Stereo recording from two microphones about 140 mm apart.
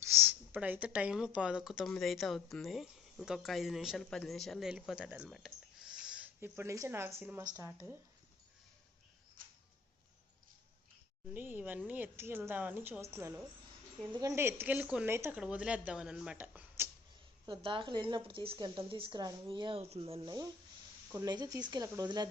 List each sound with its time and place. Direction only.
0.0 s speech: 20° right (ahead or behind)
11.3 s a woman's voice: 15° right (ahead or behind)
17.4 s speech: 35° right (ahead or behind)
20.2 s speech: 25° right (ahead or behind)